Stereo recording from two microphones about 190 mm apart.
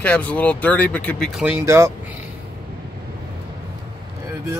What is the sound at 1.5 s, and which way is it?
Speech, 15° right (ahead or behind).